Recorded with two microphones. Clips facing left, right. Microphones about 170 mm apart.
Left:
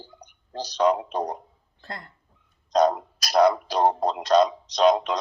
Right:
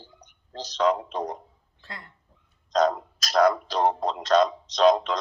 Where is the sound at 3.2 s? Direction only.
15° left (ahead or behind).